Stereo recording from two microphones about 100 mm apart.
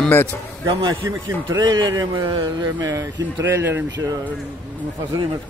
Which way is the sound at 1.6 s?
40° right (ahead or behind).